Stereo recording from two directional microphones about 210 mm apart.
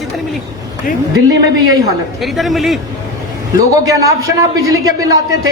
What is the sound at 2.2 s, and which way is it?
Speech, centre (ahead or behind).